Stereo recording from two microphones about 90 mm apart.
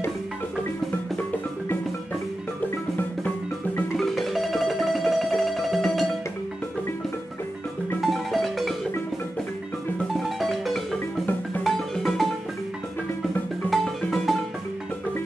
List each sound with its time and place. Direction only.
3.0 s music: 20° left (ahead or behind)
3.9 s music: centre (ahead or behind)
8.0 s music: centre (ahead or behind)
10.4 s music: centre (ahead or behind)
13.7 s music: centre (ahead or behind)